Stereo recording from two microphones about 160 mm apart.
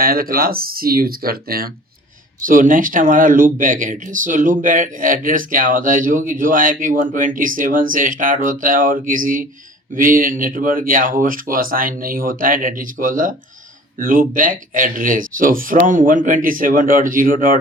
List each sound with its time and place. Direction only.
0.0 s speech: 65° right (ahead or behind)
2.4 s speech: 55° right (ahead or behind)